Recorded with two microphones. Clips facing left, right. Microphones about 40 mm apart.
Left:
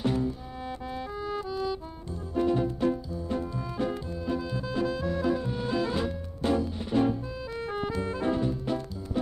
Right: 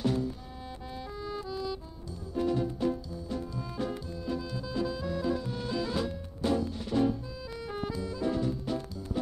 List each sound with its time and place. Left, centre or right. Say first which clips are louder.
0.0 s music: left 2 dB; left
4.6 s music: left 3 dB; left
5.4 s music: left 4 dB; left
7.6 s clarinet: left 4 dB; left
7.9 s music: left 4 dB; left
8.3 s music: left 2 dB; left